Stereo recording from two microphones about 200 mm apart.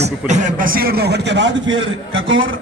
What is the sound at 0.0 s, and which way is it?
A man's voice, 35° right (ahead or behind).